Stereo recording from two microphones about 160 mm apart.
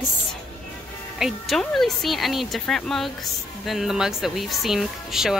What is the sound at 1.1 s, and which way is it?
Speech, centre (ahead or behind).